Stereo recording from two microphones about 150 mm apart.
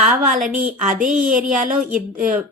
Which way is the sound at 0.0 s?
60° right (ahead or behind).